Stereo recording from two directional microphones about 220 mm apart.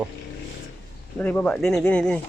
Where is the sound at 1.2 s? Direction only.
5° left (ahead or behind).